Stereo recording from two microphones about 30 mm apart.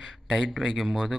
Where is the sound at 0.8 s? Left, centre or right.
Centre.